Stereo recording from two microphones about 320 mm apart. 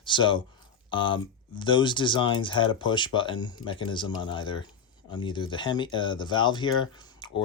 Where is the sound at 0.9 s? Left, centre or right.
Centre.